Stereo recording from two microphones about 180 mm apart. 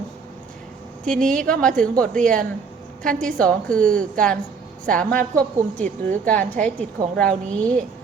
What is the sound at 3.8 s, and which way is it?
Speech, 45° right (ahead or behind).